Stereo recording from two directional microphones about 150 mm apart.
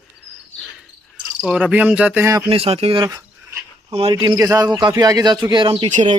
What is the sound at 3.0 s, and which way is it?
Cricket, 20° right (ahead or behind).